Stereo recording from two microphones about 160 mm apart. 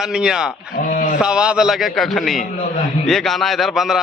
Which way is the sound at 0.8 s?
55° left (ahead or behind).